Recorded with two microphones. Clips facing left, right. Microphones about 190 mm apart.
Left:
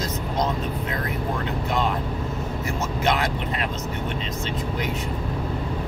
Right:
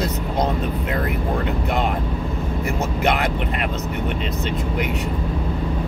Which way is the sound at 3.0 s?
60° right (ahead or behind).